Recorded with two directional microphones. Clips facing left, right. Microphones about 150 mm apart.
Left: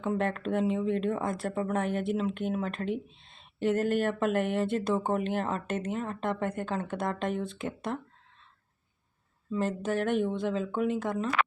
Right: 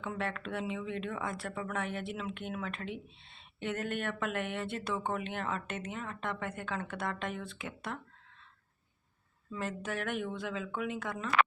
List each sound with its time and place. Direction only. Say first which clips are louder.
0.0 s speech: left 8 dB; 35° left (ahead or behind)
9.5 s speech: left 8 dB; 30° left (ahead or behind)